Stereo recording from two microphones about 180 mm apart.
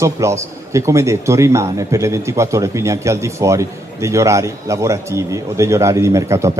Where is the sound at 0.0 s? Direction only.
15° right (ahead or behind).